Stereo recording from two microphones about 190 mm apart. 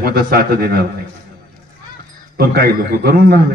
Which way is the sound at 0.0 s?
55° right (ahead or behind).